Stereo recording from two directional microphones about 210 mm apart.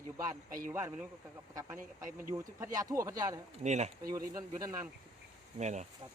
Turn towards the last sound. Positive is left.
turn(degrees=-35)  # may be behind; listen again after turning